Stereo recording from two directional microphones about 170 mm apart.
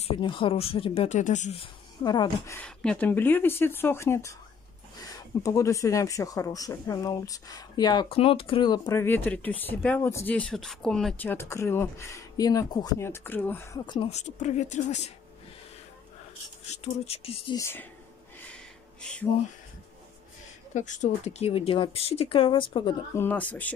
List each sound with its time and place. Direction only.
0.0 s speech: 30° left (ahead or behind)
1.6 s speech: 25° left (ahead or behind)
9.0 s speech: 10° left (ahead or behind)
14.1 s speech: 45° left (ahead or behind)
16.6 s speech: 40° left (ahead or behind)
17.6 s speech: 15° left (ahead or behind)
18.5 s a sound: 5° left (ahead or behind)
20.7 s speech: 45° left (ahead or behind); by 22.9 s 30° left (ahead or behind)
23.1 s speech: 10° left (ahead or behind)